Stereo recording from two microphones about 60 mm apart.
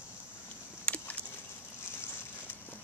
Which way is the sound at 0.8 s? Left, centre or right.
Left.